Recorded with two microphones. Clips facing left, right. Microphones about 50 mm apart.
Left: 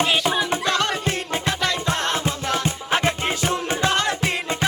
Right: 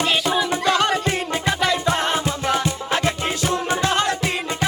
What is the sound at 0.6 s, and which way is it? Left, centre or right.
Music, centre.